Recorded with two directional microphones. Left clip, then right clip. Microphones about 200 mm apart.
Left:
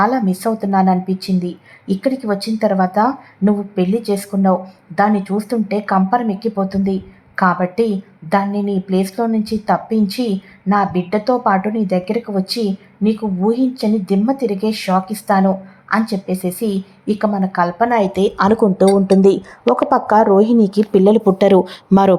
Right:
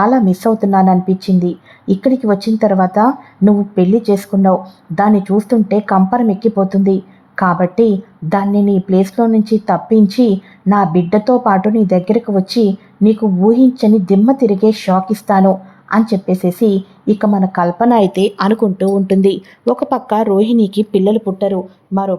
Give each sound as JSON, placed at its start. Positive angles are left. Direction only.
{"t": 0.0, "sound": "speech", "side_deg": -30}
{"t": 18.1, "sound": "a woman's voice", "side_deg": -15}
{"t": 21.2, "sound": "speech", "side_deg": 30}